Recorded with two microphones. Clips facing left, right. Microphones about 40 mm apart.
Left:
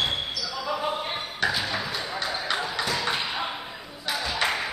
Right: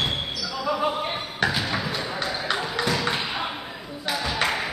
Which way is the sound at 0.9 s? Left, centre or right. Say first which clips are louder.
Right 2 dB; right.